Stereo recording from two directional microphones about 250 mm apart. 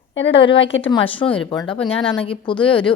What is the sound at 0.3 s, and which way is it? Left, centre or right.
Speech, left.